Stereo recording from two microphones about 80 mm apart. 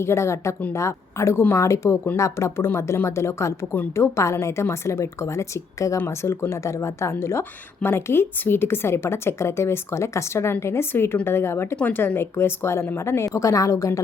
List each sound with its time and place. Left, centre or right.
0.0 s a woman's voice: left